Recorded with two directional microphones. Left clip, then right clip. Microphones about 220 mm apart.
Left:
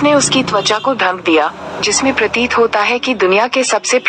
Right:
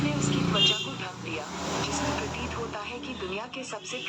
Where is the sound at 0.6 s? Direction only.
40° left (ahead or behind).